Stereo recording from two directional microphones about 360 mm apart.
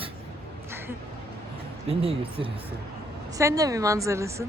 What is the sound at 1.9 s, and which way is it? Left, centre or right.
Speech, centre.